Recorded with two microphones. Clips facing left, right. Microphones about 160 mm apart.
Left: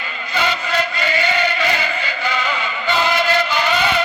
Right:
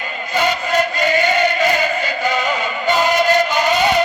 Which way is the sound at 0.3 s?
45° right (ahead or behind).